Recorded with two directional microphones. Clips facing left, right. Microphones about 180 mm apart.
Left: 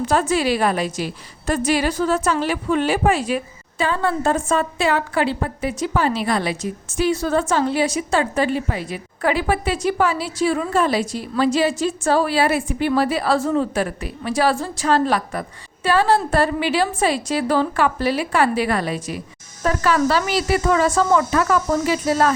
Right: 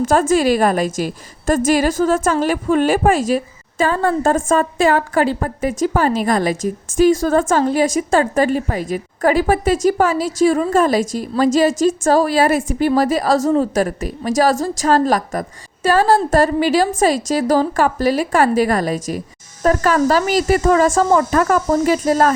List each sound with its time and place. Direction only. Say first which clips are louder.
0.0 s a woman's voice: right 5 dB; 45° right (ahead or behind)